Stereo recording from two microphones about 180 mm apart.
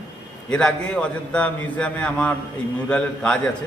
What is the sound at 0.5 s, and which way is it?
A man's voice, 5° left (ahead or behind).